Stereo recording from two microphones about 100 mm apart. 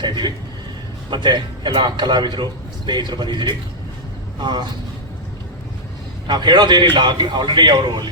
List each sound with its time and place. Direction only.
0.0 s a man's voice: 45° right (ahead or behind)
6.2 s a man's voice: 50° right (ahead or behind)